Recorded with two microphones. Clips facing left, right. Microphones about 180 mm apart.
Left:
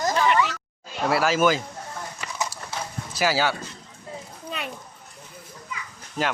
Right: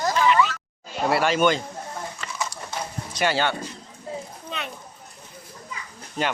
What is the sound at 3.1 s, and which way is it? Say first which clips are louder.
Speech: even; 5° left (ahead or behind).